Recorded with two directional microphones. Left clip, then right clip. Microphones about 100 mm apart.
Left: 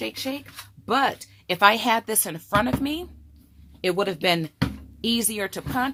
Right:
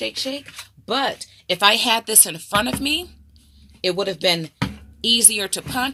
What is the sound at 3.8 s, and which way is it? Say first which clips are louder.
Speech: right 3 dB; 50° left (ahead or behind).